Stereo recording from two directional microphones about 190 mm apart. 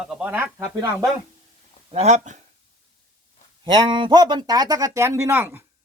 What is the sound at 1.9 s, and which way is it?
Speech, 35° right (ahead or behind).